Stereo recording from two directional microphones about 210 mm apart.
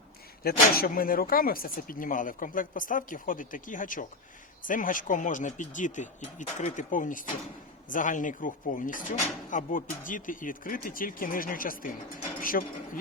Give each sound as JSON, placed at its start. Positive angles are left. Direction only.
{"t": 0.4, "sound": "speech", "side_deg": 45}